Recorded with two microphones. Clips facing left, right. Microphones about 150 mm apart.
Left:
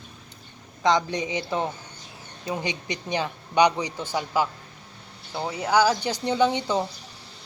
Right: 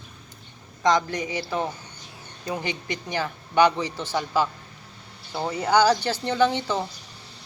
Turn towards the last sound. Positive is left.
turn(degrees=15)  # may be behind; listen again after turning